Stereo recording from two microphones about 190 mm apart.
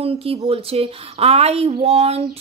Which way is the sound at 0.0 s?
30° right (ahead or behind).